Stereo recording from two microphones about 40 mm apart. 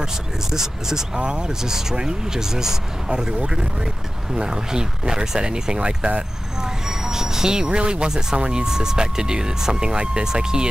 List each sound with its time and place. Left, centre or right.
0.0 s speech: centre
3.1 s speech: right